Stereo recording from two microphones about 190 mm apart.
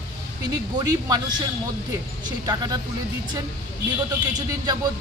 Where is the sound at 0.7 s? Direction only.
20° right (ahead or behind).